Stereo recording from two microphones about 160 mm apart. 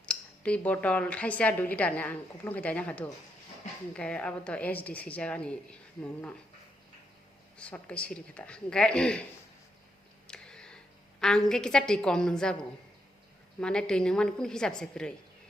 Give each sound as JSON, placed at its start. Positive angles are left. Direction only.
{"t": 0.0, "sound": "speech", "side_deg": 5}
{"t": 7.6, "sound": "speech", "side_deg": 5}
{"t": 10.2, "sound": "a sound", "side_deg": 5}
{"t": 11.2, "sound": "a woman's voice", "side_deg": 5}
{"t": 13.6, "sound": "a woman's voice", "side_deg": 5}